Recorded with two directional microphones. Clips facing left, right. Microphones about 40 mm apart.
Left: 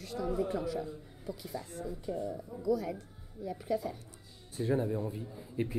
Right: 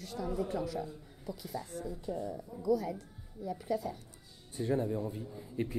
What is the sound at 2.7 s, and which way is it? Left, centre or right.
Speech, left.